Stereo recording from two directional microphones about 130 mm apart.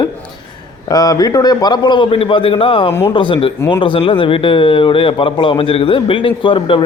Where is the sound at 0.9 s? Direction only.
25° left (ahead or behind).